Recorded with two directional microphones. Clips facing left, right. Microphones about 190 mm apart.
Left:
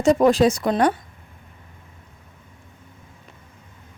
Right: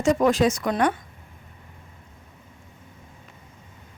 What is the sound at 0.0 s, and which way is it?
Speech, 35° left (ahead or behind).